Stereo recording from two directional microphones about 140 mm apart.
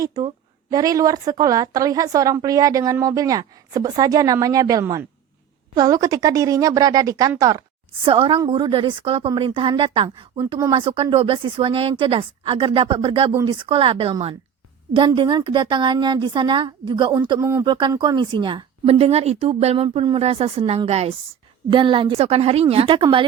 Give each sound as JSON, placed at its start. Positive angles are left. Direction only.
{"t": 0.0, "sound": "a woman's voice", "side_deg": -30}
{"t": 8.0, "sound": "speech", "side_deg": -40}
{"t": 17.4, "sound": "a woman's voice", "side_deg": -20}
{"t": 17.7, "sound": "speech", "side_deg": -35}
{"t": 21.7, "sound": "speech", "side_deg": -40}